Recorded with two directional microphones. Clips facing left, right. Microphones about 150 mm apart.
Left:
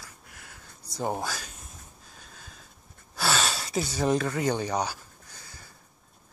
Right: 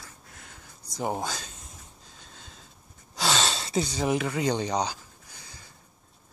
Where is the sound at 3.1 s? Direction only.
20° right (ahead or behind).